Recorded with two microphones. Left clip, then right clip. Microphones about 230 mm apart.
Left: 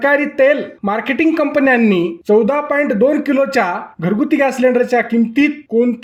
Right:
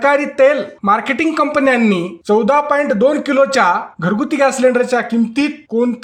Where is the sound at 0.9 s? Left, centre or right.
Right.